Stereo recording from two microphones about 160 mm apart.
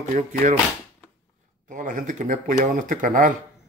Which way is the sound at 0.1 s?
55° right (ahead or behind).